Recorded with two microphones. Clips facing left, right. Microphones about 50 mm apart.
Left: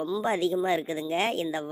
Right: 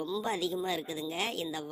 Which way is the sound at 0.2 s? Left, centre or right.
Left.